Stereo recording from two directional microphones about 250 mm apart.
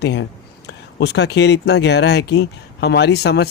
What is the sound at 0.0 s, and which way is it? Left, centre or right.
A man's voice, left.